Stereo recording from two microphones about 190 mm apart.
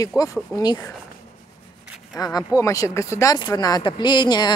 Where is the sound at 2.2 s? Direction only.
20° left (ahead or behind).